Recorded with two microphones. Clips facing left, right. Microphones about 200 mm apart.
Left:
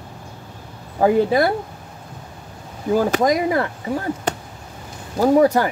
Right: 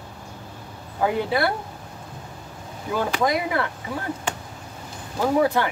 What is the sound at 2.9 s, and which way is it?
Speech, 40° left (ahead or behind).